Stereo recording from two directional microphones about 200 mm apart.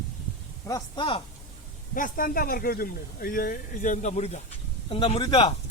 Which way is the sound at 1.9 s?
45° left (ahead or behind).